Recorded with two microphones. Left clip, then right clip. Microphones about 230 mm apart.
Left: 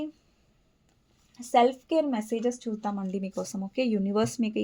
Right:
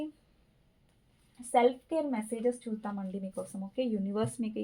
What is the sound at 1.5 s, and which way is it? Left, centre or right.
Speech, left.